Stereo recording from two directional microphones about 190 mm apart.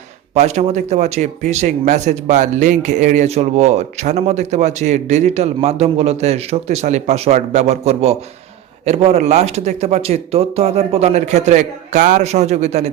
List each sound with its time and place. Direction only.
0.3 s speech: 35° right (ahead or behind)